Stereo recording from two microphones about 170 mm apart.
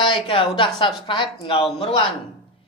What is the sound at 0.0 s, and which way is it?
Speech, 30° left (ahead or behind).